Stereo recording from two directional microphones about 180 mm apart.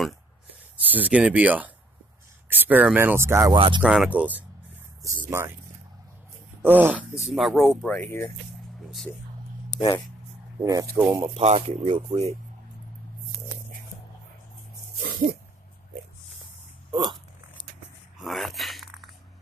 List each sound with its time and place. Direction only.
0.9 s speech: 5° right (ahead or behind)
3.5 s speech: 30° right (ahead or behind)
3.8 s speech: 5° right (ahead or behind)
6.6 s speech: 10° right (ahead or behind); by 8.3 s 10° left (ahead or behind)
9.8 s speech: 20° left (ahead or behind)
10.6 s speech: 20° right (ahead or behind)
11.2 s speech: 35° right (ahead or behind)
16.9 s speech: 25° right (ahead or behind)
18.2 s a sound: centre (ahead or behind)